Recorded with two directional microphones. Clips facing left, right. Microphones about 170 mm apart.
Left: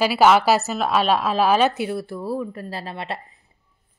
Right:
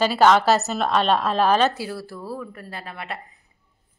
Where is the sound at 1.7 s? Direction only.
20° left (ahead or behind).